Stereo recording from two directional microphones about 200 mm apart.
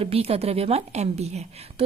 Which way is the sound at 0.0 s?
30° right (ahead or behind).